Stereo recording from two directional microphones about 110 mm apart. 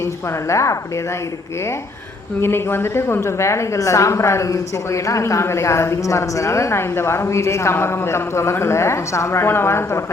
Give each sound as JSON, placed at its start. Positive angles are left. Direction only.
{"t": 0.0, "sound": "a woman's voice", "side_deg": 25}
{"t": 2.4, "sound": "a woman's voice", "side_deg": 20}